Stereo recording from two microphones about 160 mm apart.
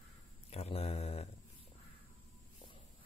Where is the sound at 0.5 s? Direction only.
40° left (ahead or behind).